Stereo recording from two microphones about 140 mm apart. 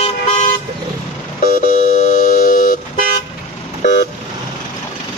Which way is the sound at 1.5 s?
75° left (ahead or behind).